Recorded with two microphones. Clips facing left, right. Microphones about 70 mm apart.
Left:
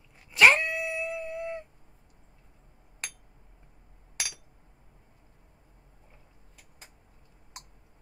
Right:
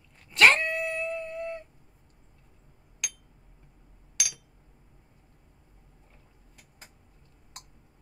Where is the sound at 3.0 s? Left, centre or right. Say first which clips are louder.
Even; left.